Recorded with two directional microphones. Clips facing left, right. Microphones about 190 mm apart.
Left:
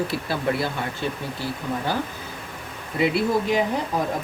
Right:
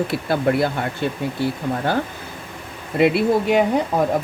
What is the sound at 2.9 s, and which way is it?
Speech, 60° right (ahead or behind).